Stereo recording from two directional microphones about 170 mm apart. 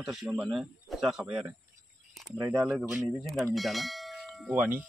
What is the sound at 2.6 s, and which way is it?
Speech, 5° right (ahead or behind).